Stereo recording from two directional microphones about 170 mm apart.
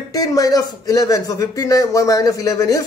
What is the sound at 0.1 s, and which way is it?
A man's voice, 20° left (ahead or behind).